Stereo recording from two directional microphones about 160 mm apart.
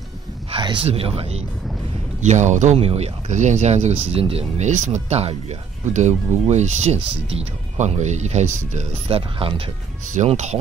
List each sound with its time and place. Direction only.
0.5 s speech: 30° right (ahead or behind)
2.2 s speech: 50° right (ahead or behind)